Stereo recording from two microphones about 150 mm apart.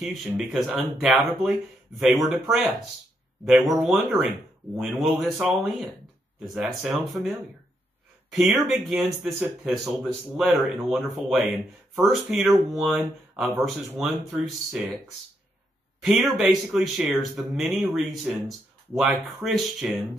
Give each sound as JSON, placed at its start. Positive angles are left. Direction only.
{"t": 0.0, "sound": "speech", "side_deg": 0}
{"t": 8.3, "sound": "speech", "side_deg": 0}
{"t": 16.0, "sound": "speech", "side_deg": 0}